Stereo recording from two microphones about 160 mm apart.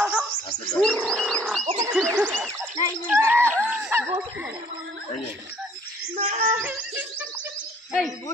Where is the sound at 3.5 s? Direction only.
15° right (ahead or behind).